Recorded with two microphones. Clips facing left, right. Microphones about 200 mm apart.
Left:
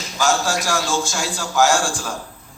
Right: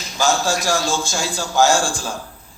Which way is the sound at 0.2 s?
25° right (ahead or behind).